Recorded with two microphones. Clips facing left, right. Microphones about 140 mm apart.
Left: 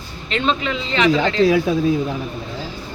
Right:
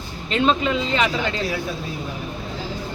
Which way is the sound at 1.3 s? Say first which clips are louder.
Left 11 dB; 90° left.